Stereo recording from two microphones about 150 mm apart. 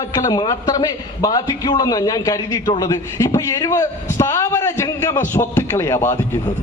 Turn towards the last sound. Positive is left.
turn(degrees=15)  # may be behind; listen again after turning